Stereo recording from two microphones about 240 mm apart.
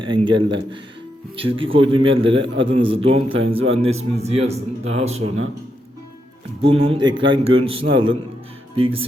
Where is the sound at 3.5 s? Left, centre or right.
Right.